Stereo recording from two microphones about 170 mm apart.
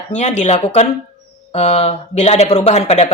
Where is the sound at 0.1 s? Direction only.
45° left (ahead or behind).